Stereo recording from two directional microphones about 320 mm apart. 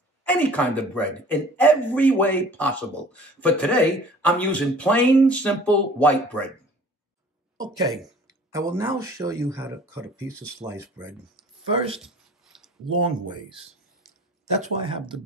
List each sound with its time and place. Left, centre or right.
0.2 s a man's voice: centre
7.5 s speech: centre
7.9 s speech: centre
12.0 s a sound: centre
13.0 s speech: centre